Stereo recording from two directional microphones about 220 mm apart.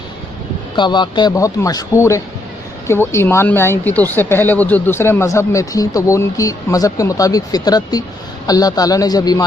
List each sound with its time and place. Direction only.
0.8 s speech: 20° left (ahead or behind)